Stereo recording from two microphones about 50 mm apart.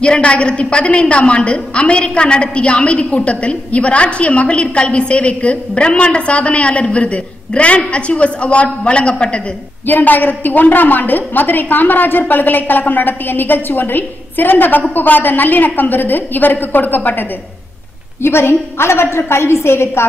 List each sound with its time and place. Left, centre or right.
0.0 s a woman's voice: left
9.8 s a woman's voice: left
18.2 s a woman's voice: left